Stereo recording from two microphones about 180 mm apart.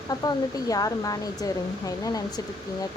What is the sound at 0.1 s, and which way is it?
Speech, 20° left (ahead or behind).